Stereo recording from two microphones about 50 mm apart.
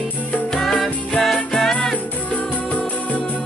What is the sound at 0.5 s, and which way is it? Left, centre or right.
Music, centre.